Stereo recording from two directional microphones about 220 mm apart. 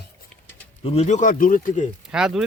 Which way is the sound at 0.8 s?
30° left (ahead or behind).